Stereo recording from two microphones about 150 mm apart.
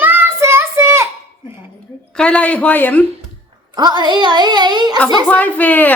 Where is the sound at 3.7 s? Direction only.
30° right (ahead or behind).